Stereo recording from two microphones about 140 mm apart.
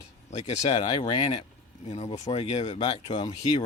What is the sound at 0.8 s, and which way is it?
Speech, 35° left (ahead or behind).